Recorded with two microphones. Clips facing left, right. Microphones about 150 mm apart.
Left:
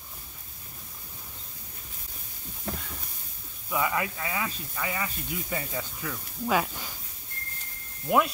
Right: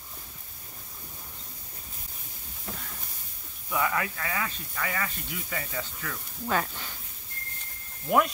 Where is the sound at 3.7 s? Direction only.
15° left (ahead or behind).